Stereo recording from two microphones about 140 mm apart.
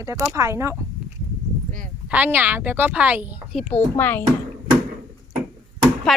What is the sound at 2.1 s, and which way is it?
A woman's voice, 10° right (ahead or behind).